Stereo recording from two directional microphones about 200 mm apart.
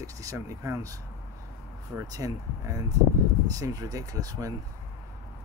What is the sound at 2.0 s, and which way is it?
Speech, 15° right (ahead or behind).